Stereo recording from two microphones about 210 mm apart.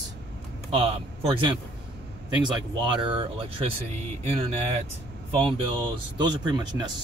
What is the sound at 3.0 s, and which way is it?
Speech, 25° right (ahead or behind).